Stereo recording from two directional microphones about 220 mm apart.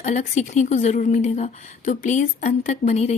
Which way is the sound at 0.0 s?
35° left (ahead or behind).